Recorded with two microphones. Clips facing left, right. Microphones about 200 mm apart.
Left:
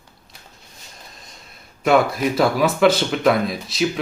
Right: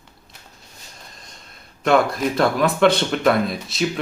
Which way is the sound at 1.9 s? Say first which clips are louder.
Left 1 dB; 5° left (ahead or behind).